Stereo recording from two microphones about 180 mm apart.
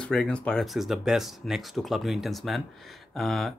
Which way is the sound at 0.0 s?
5° left (ahead or behind).